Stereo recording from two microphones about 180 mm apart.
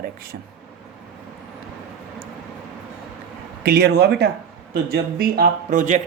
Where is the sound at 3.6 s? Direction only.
65° right (ahead or behind); by 6.0 s 45° right (ahead or behind).